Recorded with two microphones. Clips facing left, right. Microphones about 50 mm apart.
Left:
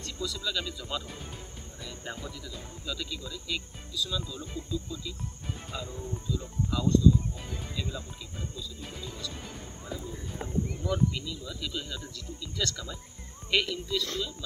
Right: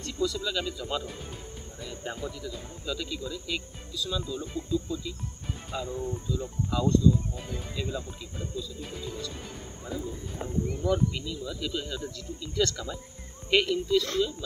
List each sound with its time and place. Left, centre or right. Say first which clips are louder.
0.0 s speech: right 5 dB; centre
5.7 s speech: right 7 dB; centre
6.7 s speech: even; centre
8.8 s speech: right 3 dB; centre